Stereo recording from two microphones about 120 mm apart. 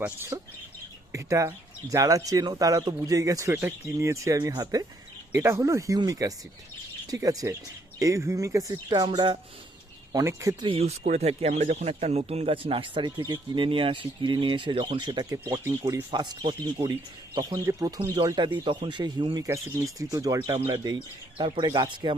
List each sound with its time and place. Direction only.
0.0 s speech: 20° right (ahead or behind)
5.3 s speech: 20° right (ahead or behind)
9.1 s speech: 40° right (ahead or behind)
10.1 s speech: 30° right (ahead or behind)
10.6 s speech: 55° right (ahead or behind); by 18.2 s 30° right (ahead or behind)
18.6 s speech: 40° right (ahead or behind)
19.5 s speech: 25° right (ahead or behind)
21.3 s speech: 45° right (ahead or behind)